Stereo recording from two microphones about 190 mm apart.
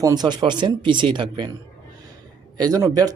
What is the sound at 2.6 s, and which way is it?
Speech, 20° right (ahead or behind).